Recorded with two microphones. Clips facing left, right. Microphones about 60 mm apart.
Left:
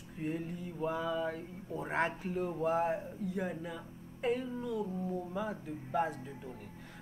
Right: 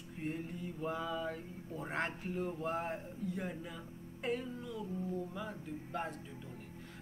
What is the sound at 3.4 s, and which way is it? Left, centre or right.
Speech, centre.